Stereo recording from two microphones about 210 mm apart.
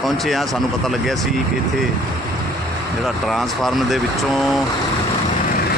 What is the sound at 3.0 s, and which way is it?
Speech, centre (ahead or behind).